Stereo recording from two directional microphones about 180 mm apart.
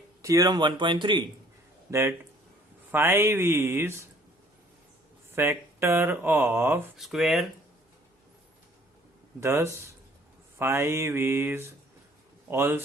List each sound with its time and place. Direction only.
0.2 s speech: 15° right (ahead or behind)
1.9 s speech: 15° right (ahead or behind)
5.3 s speech: 10° right (ahead or behind)
6.9 s speech: centre (ahead or behind)
9.4 s speech: 15° right (ahead or behind)